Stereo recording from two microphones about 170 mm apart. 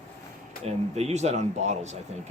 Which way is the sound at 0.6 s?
40° right (ahead or behind).